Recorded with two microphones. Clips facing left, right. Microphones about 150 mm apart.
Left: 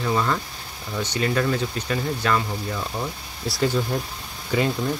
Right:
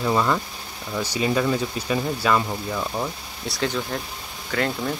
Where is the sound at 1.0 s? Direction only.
10° right (ahead or behind).